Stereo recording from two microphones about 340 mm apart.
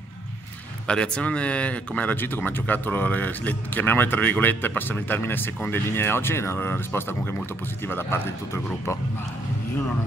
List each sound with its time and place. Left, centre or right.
0.8 s a man's voice: centre